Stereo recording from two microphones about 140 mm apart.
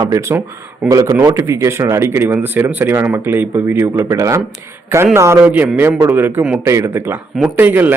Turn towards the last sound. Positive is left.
turn(degrees=-15)  # may be behind; listen again after turning